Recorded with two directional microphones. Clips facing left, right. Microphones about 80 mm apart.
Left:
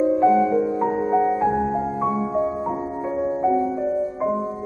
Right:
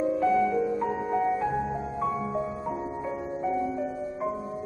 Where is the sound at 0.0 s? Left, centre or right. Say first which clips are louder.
Left 7 dB; left.